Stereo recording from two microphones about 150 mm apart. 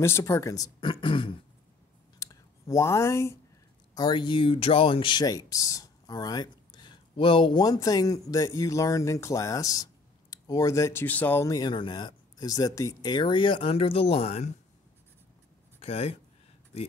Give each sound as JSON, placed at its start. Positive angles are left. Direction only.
{"t": 0.0, "sound": "speech", "side_deg": 15}
{"t": 0.7, "sound": "speech", "side_deg": 35}
{"t": 2.7, "sound": "speech", "side_deg": 20}
{"t": 3.9, "sound": "speech", "side_deg": 30}
{"t": 15.8, "sound": "speech", "side_deg": 45}